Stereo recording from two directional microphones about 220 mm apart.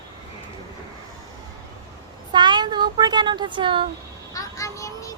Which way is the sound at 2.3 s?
20° right (ahead or behind).